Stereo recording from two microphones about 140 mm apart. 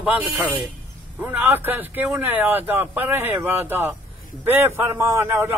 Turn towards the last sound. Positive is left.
turn(degrees=-20)  # may be behind; listen again after turning